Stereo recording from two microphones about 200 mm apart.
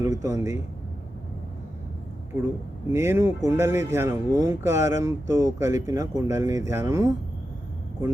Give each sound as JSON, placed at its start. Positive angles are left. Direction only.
{"t": 0.0, "sound": "speech", "side_deg": -15}
{"t": 2.9, "sound": "speech", "side_deg": -15}